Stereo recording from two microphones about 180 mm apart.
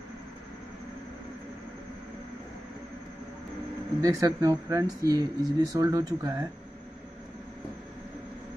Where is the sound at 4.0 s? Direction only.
20° right (ahead or behind).